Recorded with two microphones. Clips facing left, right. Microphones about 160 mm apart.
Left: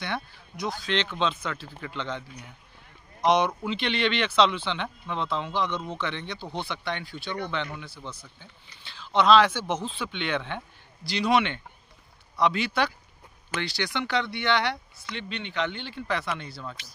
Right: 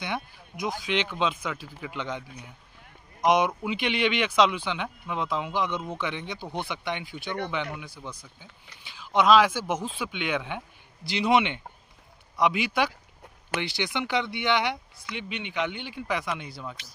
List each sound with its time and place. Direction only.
0.0 s speech: 15° right (ahead or behind)
11.1 s speech: 20° right (ahead or behind)